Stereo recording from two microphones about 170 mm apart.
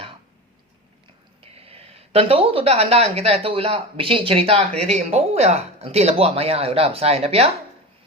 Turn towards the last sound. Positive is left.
turn(degrees=-35)  # may be behind; listen again after turning